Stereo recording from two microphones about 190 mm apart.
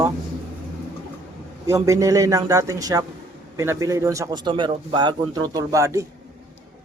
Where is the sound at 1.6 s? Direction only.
15° right (ahead or behind).